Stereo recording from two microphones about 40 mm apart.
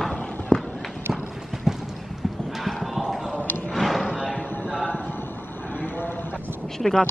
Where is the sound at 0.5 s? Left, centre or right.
Centre.